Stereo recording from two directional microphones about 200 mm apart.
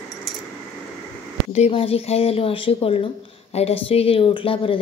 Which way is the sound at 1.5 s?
30° left (ahead or behind).